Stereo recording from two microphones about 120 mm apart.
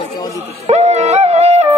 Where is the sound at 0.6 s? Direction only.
60° right (ahead or behind).